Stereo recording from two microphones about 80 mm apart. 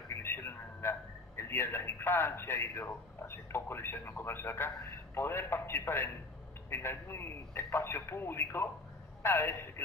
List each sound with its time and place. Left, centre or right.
0.1 s a man's voice: left